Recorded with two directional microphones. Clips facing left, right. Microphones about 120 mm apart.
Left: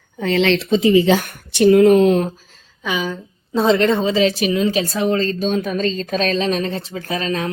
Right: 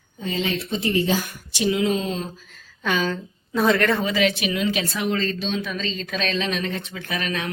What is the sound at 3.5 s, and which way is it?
Speech, 25° left (ahead or behind).